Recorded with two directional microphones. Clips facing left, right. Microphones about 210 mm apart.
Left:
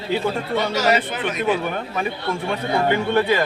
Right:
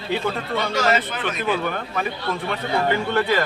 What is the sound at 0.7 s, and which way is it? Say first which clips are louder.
A man's voice: even; 20° left (ahead or behind).